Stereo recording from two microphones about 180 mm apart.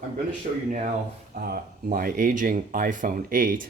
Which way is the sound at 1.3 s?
50° right (ahead or behind).